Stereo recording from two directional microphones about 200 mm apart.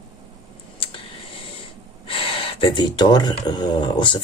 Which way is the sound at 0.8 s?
25° left (ahead or behind).